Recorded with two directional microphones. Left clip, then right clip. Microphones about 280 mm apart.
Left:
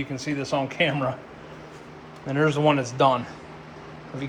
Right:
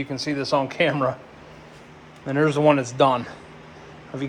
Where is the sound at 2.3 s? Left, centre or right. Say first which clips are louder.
Right 3 dB; right.